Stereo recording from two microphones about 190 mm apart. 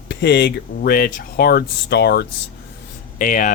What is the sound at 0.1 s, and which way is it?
Speech, 60° left (ahead or behind).